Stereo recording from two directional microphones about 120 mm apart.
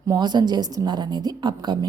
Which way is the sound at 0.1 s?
35° right (ahead or behind).